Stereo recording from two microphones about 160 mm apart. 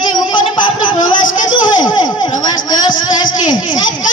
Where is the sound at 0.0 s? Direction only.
30° left (ahead or behind).